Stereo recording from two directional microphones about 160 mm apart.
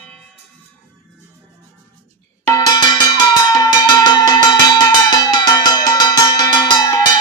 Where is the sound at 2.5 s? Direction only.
25° left (ahead or behind).